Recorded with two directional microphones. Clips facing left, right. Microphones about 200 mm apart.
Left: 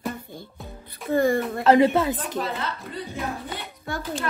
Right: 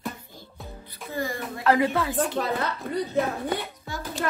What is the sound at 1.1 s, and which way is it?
Music, 55° left (ahead or behind).